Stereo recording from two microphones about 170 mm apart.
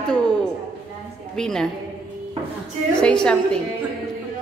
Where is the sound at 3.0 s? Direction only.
5° left (ahead or behind).